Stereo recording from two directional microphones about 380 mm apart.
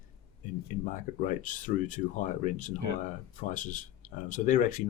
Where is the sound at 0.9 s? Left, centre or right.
Centre.